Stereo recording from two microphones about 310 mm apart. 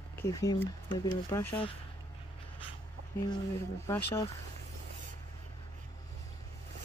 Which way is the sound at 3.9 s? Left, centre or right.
Centre.